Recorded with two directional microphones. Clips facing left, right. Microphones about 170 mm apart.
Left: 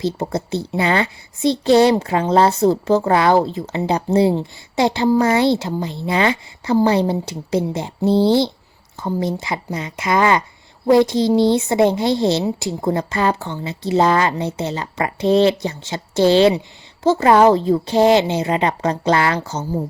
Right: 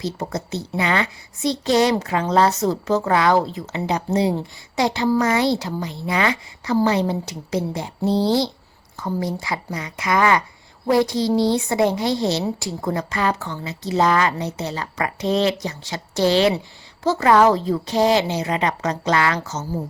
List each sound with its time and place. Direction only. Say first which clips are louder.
0.0 s a woman's voice: left 5 dB; 30° left (ahead or behind)